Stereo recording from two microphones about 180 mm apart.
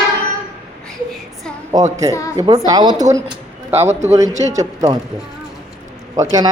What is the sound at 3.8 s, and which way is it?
Speech, 40° right (ahead or behind).